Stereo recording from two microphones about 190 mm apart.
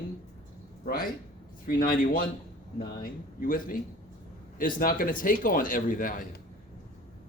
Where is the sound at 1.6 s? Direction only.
50° left (ahead or behind).